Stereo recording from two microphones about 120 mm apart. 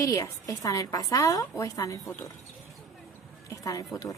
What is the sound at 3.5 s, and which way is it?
Music, 30° left (ahead or behind).